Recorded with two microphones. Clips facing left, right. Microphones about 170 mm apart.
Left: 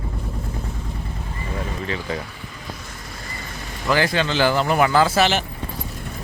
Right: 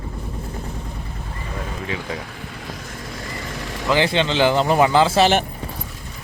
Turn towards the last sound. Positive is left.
turn(degrees=-25)  # may be behind; listen again after turning